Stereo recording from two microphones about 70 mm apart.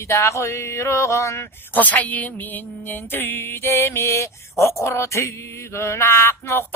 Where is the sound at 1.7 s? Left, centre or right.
Left.